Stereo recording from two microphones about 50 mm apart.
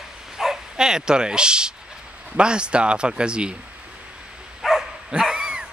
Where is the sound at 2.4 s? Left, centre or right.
Centre.